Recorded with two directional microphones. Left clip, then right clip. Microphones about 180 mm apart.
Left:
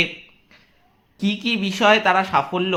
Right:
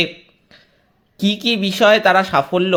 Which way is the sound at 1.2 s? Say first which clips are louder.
Right 5 dB; 35° right (ahead or behind).